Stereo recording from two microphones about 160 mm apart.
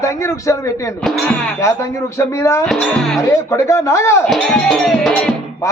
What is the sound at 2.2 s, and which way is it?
Speech, 20° left (ahead or behind).